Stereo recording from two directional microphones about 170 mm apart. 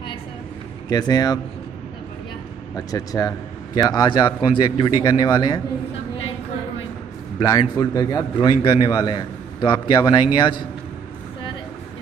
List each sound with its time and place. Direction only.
0.8 s a man's voice: 20° left (ahead or behind)
2.7 s a man's voice: 20° left (ahead or behind)
7.3 s a man's voice: 20° left (ahead or behind)